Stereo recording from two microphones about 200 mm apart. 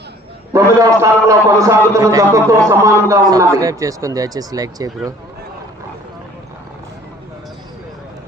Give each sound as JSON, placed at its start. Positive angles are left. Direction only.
{"t": 0.5, "sound": "a man's voice", "side_deg": -15}